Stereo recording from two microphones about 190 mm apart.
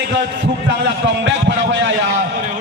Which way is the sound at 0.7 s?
70° right (ahead or behind).